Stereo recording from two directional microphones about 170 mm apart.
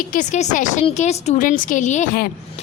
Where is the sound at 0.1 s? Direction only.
45° left (ahead or behind).